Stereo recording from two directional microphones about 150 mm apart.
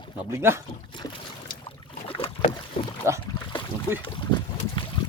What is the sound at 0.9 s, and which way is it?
Boat, 30° left (ahead or behind).